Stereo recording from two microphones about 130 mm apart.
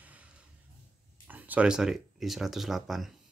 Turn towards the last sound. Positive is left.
turn(degrees=0)  # may be behind; listen again after turning